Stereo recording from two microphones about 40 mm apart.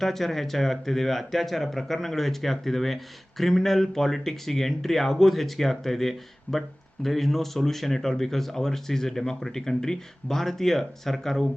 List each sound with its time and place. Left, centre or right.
0.0 s speech: centre